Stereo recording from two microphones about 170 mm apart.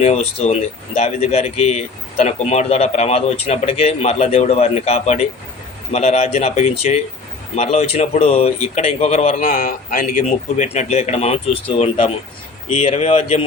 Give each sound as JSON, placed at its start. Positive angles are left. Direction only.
{"t": 0.0, "sound": "speech", "side_deg": 40}